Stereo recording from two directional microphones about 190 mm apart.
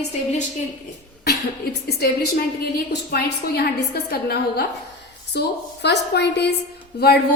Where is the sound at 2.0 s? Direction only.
55° left (ahead or behind).